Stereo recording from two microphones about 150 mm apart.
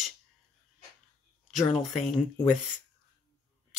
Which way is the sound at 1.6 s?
40° left (ahead or behind).